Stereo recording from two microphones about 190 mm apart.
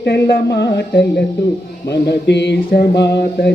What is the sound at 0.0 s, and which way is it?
Mantra, 60° left (ahead or behind).